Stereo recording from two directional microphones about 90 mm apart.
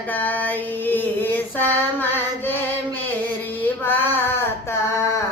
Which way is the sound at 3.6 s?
25° left (ahead or behind).